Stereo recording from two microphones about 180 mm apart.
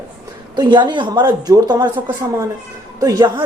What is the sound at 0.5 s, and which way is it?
Speech, 25° right (ahead or behind).